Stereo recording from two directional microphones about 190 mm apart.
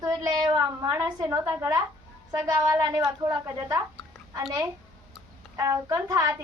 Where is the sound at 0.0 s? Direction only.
20° right (ahead or behind).